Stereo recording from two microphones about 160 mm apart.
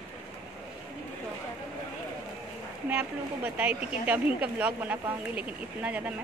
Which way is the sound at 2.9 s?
10° right (ahead or behind).